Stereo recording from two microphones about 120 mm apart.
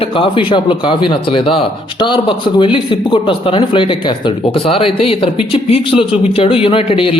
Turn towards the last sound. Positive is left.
turn(degrees=50)  # may be behind; listen again after turning